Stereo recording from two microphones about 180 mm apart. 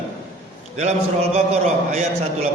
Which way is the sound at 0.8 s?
40° right (ahead or behind).